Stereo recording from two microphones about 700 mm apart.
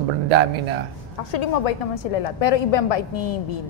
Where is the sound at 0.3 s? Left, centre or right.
Right.